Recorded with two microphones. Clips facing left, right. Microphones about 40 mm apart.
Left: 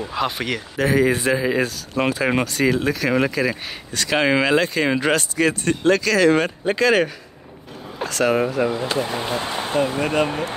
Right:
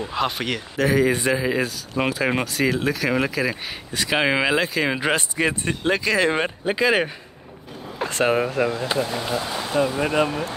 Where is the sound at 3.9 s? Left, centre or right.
Centre.